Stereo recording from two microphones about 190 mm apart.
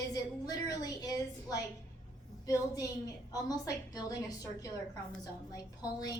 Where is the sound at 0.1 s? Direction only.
20° left (ahead or behind).